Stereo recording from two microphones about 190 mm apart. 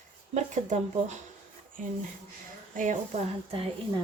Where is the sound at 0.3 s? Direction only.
40° right (ahead or behind).